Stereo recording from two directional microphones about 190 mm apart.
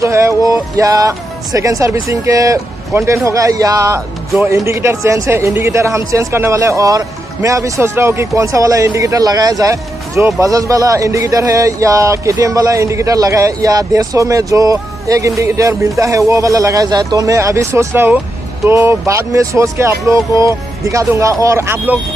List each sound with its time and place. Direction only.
0.0 s speech: 15° right (ahead or behind)